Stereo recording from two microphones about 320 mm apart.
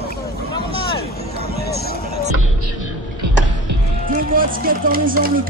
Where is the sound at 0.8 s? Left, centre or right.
Centre.